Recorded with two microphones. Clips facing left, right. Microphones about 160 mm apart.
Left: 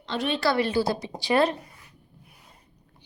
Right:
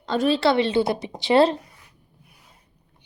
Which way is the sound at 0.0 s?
45° right (ahead or behind).